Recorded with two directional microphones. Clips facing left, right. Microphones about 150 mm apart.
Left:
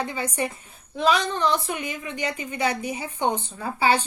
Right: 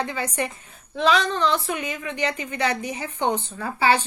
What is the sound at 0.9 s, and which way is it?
A woman's voice, 15° left (ahead or behind).